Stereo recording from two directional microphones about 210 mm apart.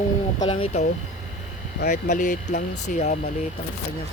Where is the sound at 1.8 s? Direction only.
50° left (ahead or behind); by 3.2 s 35° left (ahead or behind).